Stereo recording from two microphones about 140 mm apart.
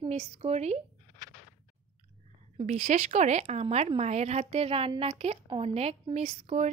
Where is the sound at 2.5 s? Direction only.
55° right (ahead or behind).